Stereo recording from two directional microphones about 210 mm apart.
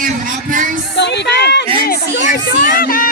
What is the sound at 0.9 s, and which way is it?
A woman's voice, 55° left (ahead or behind).